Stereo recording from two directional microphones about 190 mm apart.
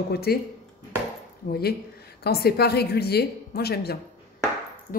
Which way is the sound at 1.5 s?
55° left (ahead or behind).